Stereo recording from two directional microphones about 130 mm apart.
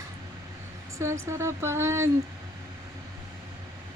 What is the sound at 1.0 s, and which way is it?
Speech, 20° right (ahead or behind).